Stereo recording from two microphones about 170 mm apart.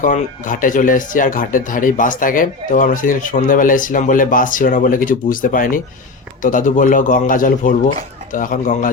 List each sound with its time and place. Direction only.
0.0 s speech: 50° left (ahead or behind)